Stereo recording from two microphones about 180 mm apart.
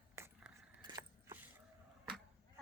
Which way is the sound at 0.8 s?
20° right (ahead or behind).